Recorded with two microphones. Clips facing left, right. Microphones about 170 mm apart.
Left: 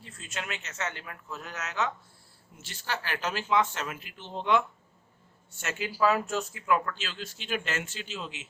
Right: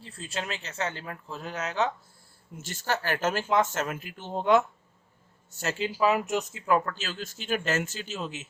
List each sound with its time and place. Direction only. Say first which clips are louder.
0.0 s speech: right 4 dB; 35° right (ahead or behind)
2.6 s speech: right 5 dB; 45° right (ahead or behind); by 6.7 s 20° right (ahead or behind)
6.7 s speech: right 2 dB; 35° right (ahead or behind)